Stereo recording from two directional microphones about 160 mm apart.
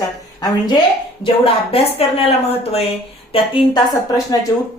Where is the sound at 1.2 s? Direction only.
35° left (ahead or behind).